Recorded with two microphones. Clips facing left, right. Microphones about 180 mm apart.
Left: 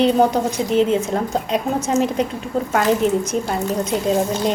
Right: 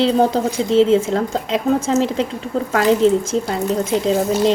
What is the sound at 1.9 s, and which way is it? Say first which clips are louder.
Speech: even; 90° right.